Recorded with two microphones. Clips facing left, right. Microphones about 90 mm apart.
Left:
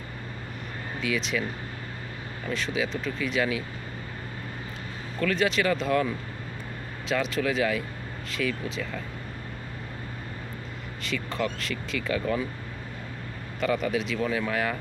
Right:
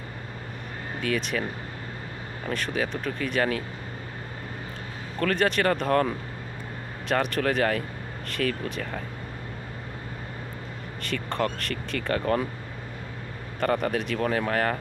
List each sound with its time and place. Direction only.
1.0 s speech: 50° right (ahead or behind)
2.5 s speech: 55° right (ahead or behind)
5.2 s speech: 55° right (ahead or behind)
11.0 s speech: 55° right (ahead or behind)
13.6 s speech: 55° right (ahead or behind)